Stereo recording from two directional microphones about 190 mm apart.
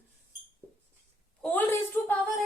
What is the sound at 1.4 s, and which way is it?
Speech, 10° left (ahead or behind).